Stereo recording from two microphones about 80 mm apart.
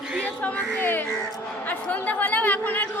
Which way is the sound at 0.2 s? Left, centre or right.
Centre.